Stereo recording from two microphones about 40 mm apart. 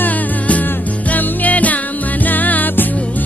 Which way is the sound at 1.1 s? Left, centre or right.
Left.